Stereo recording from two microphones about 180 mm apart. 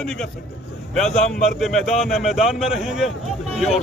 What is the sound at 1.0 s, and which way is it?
Speech, 40° left (ahead or behind).